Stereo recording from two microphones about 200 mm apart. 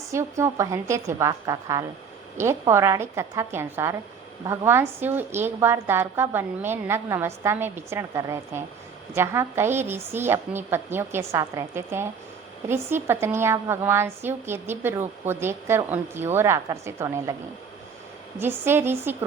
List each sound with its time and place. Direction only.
0.1 s a woman's voice: 15° right (ahead or behind)
18.3 s a woman's voice: 10° right (ahead or behind)